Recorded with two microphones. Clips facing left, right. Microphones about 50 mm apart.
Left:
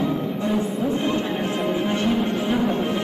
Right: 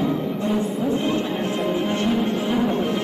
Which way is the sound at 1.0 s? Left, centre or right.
Left.